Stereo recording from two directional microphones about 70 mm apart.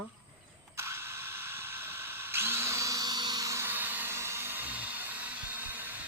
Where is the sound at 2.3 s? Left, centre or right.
Right.